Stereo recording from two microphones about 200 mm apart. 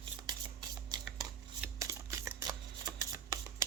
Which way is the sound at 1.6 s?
15° right (ahead or behind).